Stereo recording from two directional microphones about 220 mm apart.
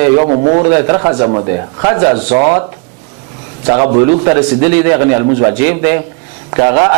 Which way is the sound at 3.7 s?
25° right (ahead or behind).